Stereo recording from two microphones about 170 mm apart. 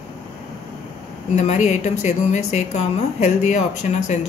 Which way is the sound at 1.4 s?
40° left (ahead or behind).